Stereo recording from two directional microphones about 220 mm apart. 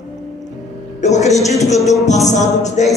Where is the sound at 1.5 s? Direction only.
15° left (ahead or behind).